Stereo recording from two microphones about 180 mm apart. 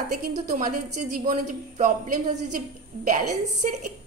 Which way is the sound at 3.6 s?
45° right (ahead or behind).